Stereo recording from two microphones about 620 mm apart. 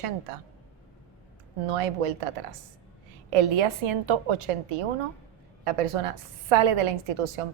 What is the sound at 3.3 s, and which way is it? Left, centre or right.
A woman's voice, right.